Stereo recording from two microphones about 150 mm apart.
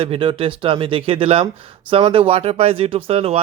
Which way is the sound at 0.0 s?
35° right (ahead or behind).